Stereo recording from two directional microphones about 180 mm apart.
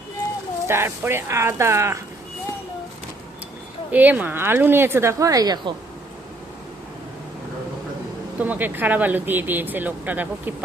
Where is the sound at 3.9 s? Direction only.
10° right (ahead or behind).